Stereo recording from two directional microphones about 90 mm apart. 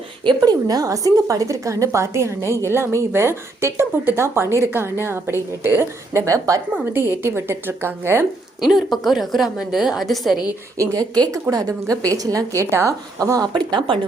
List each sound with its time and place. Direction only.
0.3 s a woman's voice: 45° right (ahead or behind)
6.9 s a woman's voice: 25° right (ahead or behind)
8.6 s a woman's voice: centre (ahead or behind)
10.8 s a woman's voice: 45° right (ahead or behind)
13.5 s speech: 60° right (ahead or behind)